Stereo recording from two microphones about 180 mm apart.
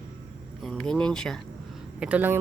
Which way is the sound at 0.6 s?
5° left (ahead or behind).